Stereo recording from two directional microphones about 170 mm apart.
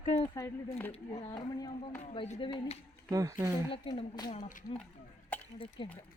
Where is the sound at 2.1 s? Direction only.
30° left (ahead or behind).